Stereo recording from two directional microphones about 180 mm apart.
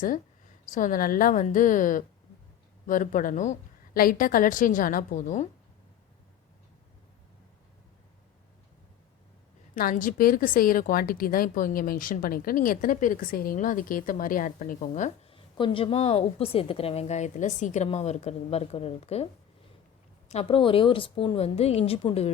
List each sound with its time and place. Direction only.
0.7 s a woman's voice: 45° left (ahead or behind)
9.7 s a woman's voice: 50° left (ahead or behind)
15.3 s a woman's voice: 30° left (ahead or behind)